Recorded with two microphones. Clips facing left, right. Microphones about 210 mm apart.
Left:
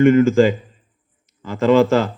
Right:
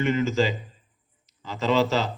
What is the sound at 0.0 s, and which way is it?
Speech, 50° left (ahead or behind).